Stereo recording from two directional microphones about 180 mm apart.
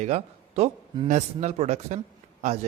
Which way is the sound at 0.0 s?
35° right (ahead or behind).